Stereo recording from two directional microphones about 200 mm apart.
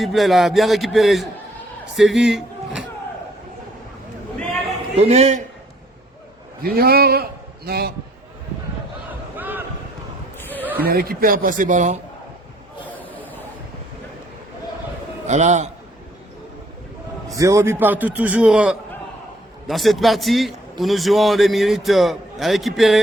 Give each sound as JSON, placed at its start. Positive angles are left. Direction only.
{"t": 0.0, "sound": "a man's voice", "side_deg": 0}
{"t": 4.9, "sound": "a man's voice", "side_deg": -30}
{"t": 6.6, "sound": "a man's voice", "side_deg": -50}
{"t": 9.3, "sound": "a sound", "side_deg": -10}
{"t": 10.8, "sound": "speech", "side_deg": -50}
{"t": 15.3, "sound": "a man's voice", "side_deg": -35}
{"t": 17.2, "sound": "a man's voice", "side_deg": -15}